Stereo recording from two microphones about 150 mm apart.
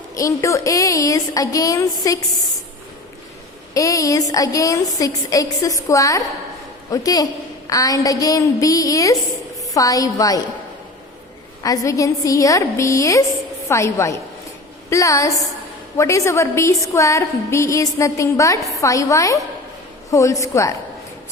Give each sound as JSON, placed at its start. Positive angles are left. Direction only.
{"t": 0.2, "sound": "a woman's voice", "side_deg": 20}
{"t": 3.8, "sound": "a woman's voice", "side_deg": 20}
{"t": 11.6, "sound": "a woman's voice", "side_deg": 20}